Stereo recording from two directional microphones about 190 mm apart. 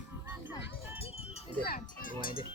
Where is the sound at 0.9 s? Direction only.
30° left (ahead or behind).